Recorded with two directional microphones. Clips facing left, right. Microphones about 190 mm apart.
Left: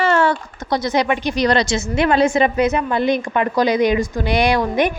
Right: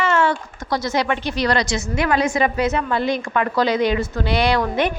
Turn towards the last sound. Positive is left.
turn(degrees=15)  # may be behind; listen again after turning